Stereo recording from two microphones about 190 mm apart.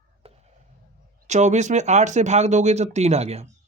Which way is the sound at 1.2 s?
40° right (ahead or behind).